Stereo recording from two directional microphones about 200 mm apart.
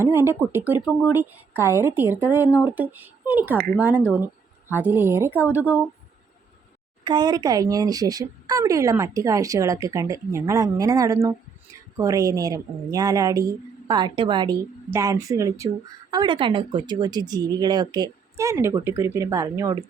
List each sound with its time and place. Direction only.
0.0 s a woman's voice: 10° right (ahead or behind)
7.0 s speech: 20° right (ahead or behind)